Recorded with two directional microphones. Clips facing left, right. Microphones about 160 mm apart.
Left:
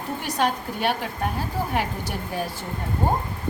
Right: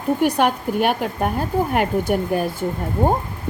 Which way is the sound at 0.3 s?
55° right (ahead or behind).